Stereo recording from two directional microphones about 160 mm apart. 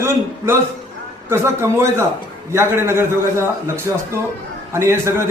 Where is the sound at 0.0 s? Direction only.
15° right (ahead or behind).